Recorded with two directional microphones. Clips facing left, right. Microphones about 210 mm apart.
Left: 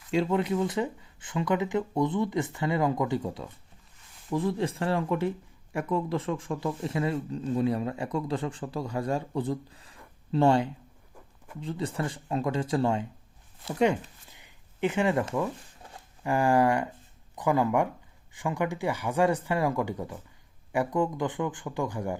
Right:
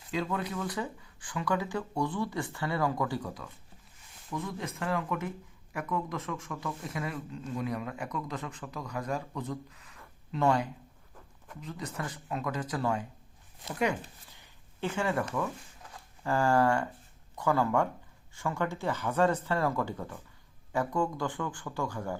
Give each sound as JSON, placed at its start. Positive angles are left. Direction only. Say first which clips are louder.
{"t": 0.1, "sound": "speech", "louder": "left 7 dB", "side_deg": 25}
{"t": 14.3, "sound": "a sound", "louder": "left 7 dB", "side_deg": 15}
{"t": 16.2, "sound": "speech", "louder": "left 3 dB", "side_deg": 15}